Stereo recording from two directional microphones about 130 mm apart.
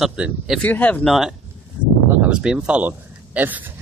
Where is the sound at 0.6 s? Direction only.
15° left (ahead or behind).